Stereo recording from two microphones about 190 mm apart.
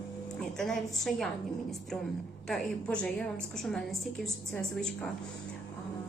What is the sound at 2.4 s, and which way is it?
A woman's voice, 5° left (ahead or behind).